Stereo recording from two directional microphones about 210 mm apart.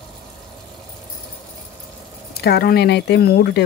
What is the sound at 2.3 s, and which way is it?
Speech, 50° left (ahead or behind).